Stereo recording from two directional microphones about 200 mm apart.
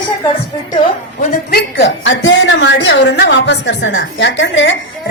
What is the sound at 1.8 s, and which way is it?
A woman's voice, 65° left (ahead or behind).